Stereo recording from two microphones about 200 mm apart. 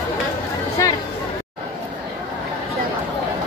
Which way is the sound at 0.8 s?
15° left (ahead or behind).